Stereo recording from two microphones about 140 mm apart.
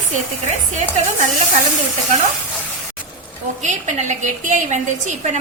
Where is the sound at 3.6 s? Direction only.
60° right (ahead or behind).